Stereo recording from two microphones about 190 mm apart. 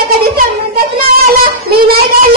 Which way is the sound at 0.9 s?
50° right (ahead or behind).